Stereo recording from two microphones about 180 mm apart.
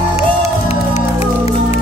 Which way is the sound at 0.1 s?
35° left (ahead or behind).